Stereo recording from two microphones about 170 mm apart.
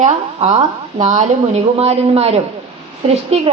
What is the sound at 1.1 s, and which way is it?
A woman's voice, 40° right (ahead or behind).